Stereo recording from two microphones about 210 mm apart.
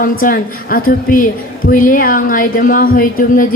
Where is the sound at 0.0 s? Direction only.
40° left (ahead or behind).